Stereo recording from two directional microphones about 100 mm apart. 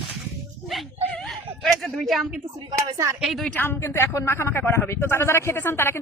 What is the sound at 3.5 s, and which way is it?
A man's voice, 20° left (ahead or behind).